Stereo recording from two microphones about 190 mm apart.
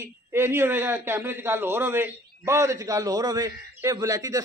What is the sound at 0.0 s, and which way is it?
A man's voice, 10° right (ahead or behind).